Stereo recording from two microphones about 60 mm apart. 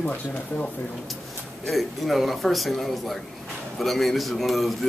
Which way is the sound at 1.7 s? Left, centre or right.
Centre.